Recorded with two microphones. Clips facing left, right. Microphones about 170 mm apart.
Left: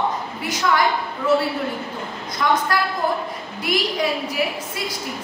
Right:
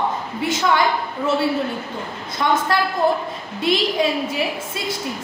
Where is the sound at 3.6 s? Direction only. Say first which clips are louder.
Right 3 dB; 25° right (ahead or behind).